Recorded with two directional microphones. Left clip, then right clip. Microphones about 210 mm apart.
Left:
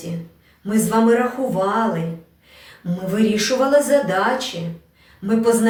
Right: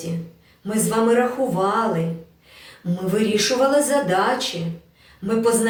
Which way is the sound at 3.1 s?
Centre (ahead or behind).